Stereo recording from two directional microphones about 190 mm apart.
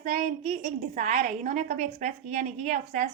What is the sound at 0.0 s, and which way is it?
A woman's voice, 40° right (ahead or behind).